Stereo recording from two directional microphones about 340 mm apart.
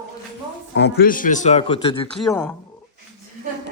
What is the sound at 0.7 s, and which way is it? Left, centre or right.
Speech, left.